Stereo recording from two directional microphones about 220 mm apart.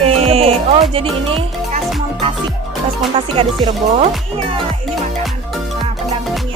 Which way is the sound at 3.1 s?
25° right (ahead or behind).